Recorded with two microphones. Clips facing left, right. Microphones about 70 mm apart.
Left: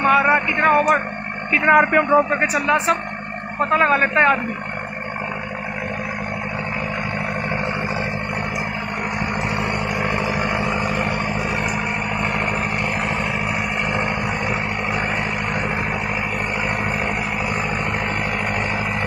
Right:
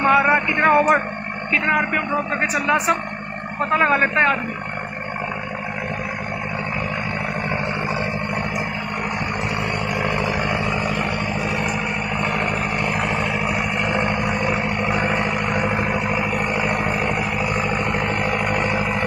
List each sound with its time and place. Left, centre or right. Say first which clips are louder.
0.0 s speech: even; centre
1.7 s a man's voice: left 9 dB; left
2.4 s a man's voice: left 1 dB; centre
10.0 s vehicle: even; centre
13.9 s a sound: right 1 dB; centre